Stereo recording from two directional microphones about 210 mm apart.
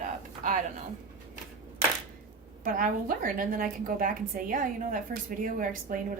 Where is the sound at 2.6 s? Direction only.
40° right (ahead or behind).